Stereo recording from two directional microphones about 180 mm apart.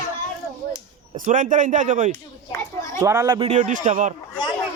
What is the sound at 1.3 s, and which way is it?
Speech, 45° right (ahead or behind).